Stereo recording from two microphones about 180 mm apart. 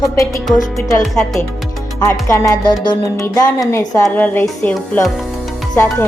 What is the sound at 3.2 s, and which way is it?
Speech, 20° left (ahead or behind).